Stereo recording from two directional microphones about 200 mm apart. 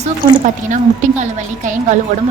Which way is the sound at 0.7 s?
35° right (ahead or behind).